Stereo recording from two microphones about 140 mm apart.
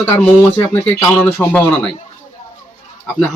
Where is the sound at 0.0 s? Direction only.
15° left (ahead or behind).